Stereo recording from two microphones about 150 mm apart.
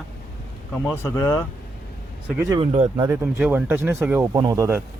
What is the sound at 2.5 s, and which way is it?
Speech, 45° right (ahead or behind).